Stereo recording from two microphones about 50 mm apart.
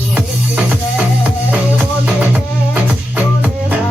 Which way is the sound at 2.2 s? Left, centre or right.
Right.